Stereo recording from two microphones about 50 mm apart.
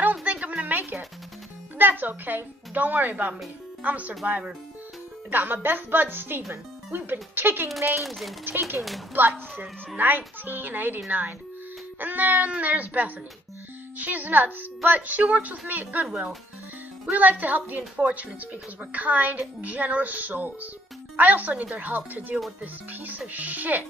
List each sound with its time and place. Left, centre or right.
0.0 s music: right
0.7 s music: right
1.8 s a woman's voice: right
5.3 s speech: right
8.0 s speech: centre
8.5 s a woman's voice: right
17.1 s a woman's voice: right